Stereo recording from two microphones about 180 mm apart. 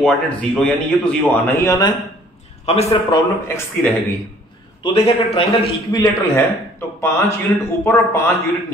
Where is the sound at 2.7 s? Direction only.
35° left (ahead or behind).